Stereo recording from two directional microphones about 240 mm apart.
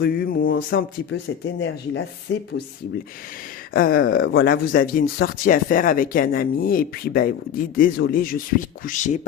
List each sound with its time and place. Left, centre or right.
0.0 s speech: left
3.7 s speech: left